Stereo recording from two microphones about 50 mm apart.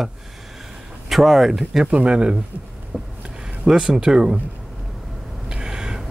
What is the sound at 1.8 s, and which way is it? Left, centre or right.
Speech, right.